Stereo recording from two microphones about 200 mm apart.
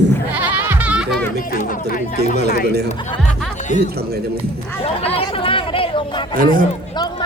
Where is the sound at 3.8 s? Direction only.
50° right (ahead or behind).